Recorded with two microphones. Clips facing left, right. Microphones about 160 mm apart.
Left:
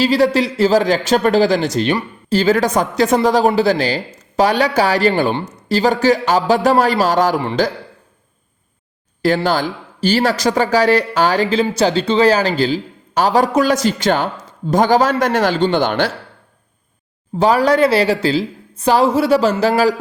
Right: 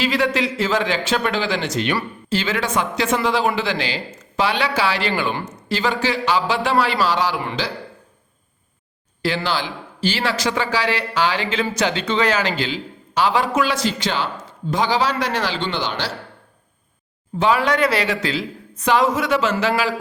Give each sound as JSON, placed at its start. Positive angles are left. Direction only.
{"t": 0.0, "sound": "speech", "side_deg": 35}
{"t": 5.3, "sound": "speech", "side_deg": 30}
{"t": 9.2, "sound": "speech", "side_deg": 45}
{"t": 17.3, "sound": "speech", "side_deg": 40}